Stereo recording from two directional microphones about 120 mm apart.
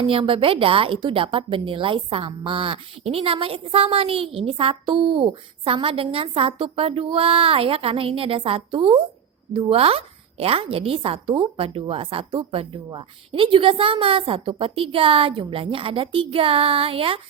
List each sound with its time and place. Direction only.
0.0 s a woman's voice: 50° right (ahead or behind)